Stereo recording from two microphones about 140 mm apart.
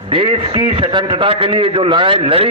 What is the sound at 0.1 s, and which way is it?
A man's voice, 40° right (ahead or behind).